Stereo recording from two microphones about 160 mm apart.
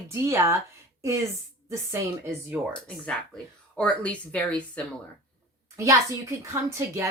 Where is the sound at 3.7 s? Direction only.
10° left (ahead or behind).